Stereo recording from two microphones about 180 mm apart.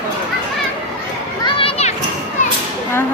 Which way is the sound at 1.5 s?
30° left (ahead or behind).